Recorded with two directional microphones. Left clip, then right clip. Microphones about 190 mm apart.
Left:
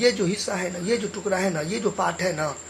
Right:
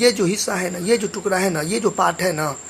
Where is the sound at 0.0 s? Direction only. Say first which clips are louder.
Right 4 dB; 35° right (ahead or behind).